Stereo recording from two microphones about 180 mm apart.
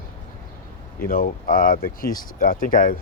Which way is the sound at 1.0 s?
50° left (ahead or behind).